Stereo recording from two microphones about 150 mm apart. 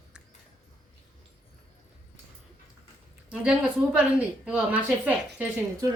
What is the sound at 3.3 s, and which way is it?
A woman's voice, 5° right (ahead or behind).